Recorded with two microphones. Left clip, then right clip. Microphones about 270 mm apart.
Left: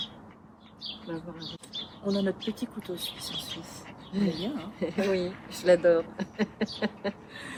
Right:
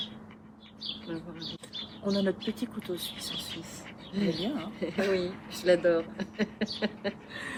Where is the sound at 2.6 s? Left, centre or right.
Centre.